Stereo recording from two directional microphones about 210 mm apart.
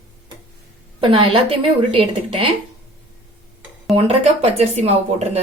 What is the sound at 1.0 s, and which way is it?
Speech, 25° right (ahead or behind).